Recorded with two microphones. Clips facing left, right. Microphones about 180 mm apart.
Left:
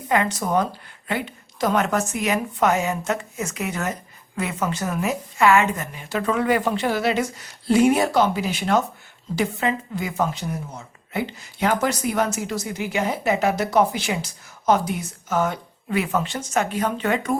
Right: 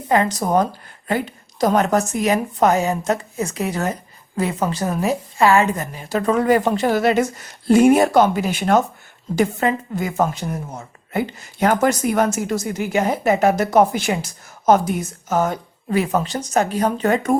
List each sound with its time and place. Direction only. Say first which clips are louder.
0.1 s a woman's voice: right 4 dB; 35° right (ahead or behind)